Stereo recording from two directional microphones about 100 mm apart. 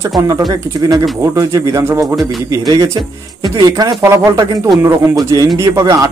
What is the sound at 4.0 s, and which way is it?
A man's voice, 30° right (ahead or behind).